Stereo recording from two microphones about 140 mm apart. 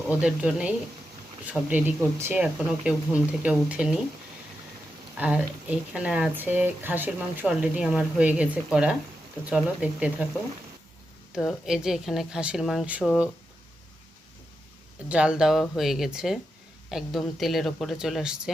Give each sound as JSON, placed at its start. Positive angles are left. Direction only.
{"t": 0.1, "sound": "a woman's voice", "side_deg": -5}
{"t": 2.1, "sound": "speech", "side_deg": -20}
{"t": 2.4, "sound": "speech", "side_deg": -5}
{"t": 5.1, "sound": "speech", "side_deg": -10}
{"t": 11.3, "sound": "a woman's voice", "side_deg": 0}
{"t": 15.1, "sound": "a woman's voice", "side_deg": -5}